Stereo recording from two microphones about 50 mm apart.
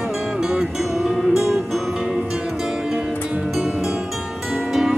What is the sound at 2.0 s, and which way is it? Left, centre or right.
Music, centre.